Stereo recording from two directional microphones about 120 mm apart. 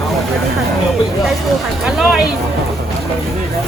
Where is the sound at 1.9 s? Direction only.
5° right (ahead or behind).